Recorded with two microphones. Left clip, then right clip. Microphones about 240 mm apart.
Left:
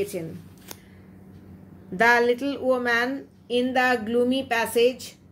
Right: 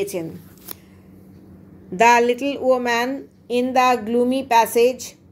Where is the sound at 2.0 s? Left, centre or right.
Centre.